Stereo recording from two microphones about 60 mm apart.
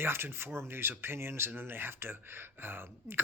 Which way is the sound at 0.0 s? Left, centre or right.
Right.